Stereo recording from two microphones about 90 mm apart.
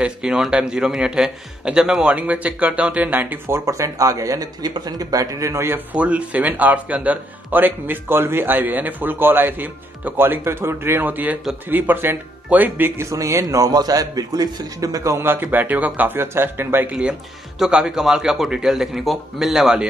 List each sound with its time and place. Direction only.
0.0 s a man's voice: 10° right (ahead or behind); by 5.8 s 30° right (ahead or behind)
5.9 s speech: 15° right (ahead or behind)
13.1 s a man's voice: 35° right (ahead or behind)
17.6 s a man's voice: 10° right (ahead or behind)